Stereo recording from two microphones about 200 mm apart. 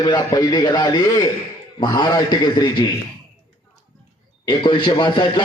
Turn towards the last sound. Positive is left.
turn(degrees=25)  # may be behind; listen again after turning